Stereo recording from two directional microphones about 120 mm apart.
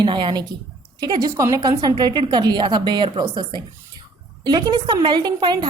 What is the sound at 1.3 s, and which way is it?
Speech, 25° right (ahead or behind).